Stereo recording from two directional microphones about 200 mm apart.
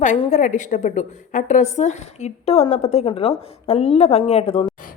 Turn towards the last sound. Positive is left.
turn(degrees=30)  # may be behind; listen again after turning